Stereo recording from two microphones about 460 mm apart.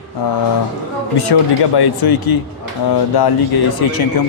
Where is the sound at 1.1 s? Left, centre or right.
Left.